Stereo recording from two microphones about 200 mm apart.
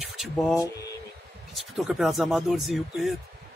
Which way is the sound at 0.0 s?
Centre (ahead or behind).